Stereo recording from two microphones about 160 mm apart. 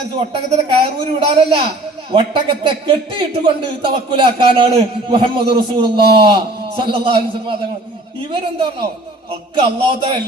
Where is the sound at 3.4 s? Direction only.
30° right (ahead or behind).